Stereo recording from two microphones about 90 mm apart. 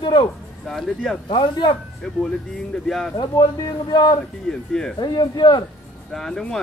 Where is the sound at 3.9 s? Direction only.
55° left (ahead or behind).